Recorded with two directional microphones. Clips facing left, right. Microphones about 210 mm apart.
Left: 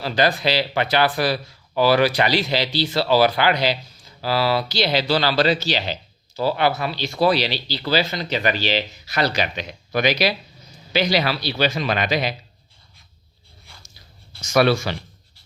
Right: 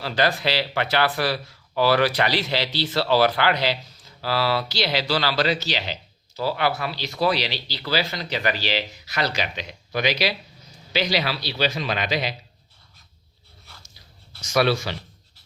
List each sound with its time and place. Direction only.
0.0 s speech: 15° left (ahead or behind); by 12.3 s 50° left (ahead or behind)
14.5 s speech: 50° left (ahead or behind)